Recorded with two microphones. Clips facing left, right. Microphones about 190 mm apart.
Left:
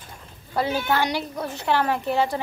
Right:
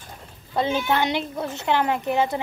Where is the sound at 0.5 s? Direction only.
20° right (ahead or behind).